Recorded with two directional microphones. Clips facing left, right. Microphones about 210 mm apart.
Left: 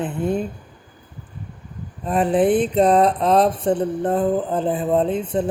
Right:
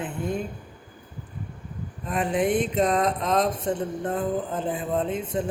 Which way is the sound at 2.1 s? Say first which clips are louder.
Left 7 dB; 35° left (ahead or behind).